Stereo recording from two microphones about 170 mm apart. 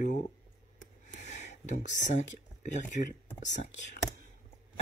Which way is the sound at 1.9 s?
45° left (ahead or behind).